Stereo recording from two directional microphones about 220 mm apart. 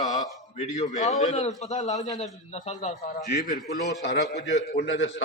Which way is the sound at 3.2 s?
50° left (ahead or behind).